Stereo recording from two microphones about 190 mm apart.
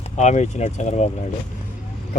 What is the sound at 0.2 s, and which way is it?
Speech, 35° left (ahead or behind).